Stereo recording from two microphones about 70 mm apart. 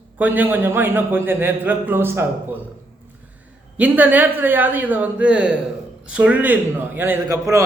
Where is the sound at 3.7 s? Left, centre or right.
Right.